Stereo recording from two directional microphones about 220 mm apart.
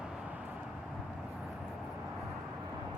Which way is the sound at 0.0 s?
5° right (ahead or behind).